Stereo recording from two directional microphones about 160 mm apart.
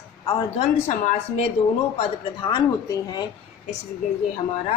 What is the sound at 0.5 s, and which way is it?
Speech, 45° left (ahead or behind).